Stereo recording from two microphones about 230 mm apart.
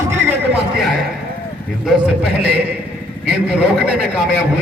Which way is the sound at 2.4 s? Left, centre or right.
Right.